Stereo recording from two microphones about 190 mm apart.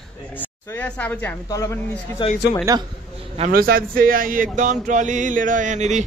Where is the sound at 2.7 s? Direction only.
20° right (ahead or behind).